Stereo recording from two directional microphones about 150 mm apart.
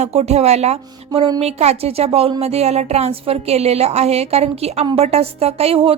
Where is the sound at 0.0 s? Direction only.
45° right (ahead or behind).